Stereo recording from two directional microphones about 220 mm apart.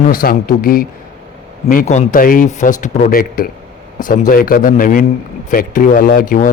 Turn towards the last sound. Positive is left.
turn(degrees=40)  # may be behind; listen again after turning